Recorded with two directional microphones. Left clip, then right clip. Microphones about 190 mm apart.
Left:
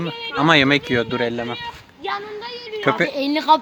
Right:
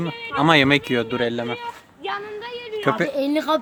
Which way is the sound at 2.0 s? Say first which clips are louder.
Left 2 dB; 35° left (ahead or behind).